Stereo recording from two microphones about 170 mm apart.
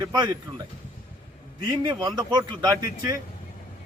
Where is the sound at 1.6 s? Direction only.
25° right (ahead or behind).